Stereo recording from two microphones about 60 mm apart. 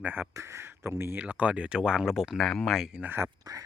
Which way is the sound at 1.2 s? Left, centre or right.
Right.